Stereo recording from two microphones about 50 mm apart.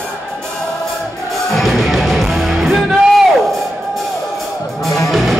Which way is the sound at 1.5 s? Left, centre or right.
Centre.